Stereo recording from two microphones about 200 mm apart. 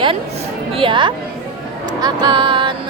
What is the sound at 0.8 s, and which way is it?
A woman's voice, 25° right (ahead or behind).